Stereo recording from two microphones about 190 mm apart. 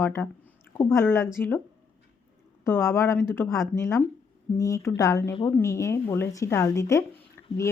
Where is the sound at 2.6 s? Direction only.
15° left (ahead or behind).